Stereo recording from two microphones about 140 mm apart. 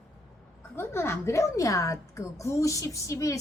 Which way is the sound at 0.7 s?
15° left (ahead or behind).